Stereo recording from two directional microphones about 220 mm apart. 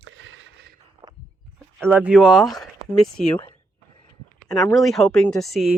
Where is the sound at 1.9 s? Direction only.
5° right (ahead or behind).